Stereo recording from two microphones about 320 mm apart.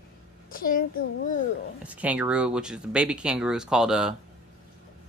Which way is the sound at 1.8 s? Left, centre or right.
Centre.